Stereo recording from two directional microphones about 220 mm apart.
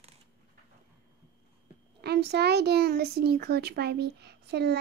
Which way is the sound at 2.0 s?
50° right (ahead or behind).